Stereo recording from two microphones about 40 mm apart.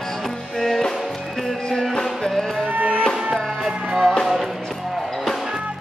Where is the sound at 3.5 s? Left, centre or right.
Centre.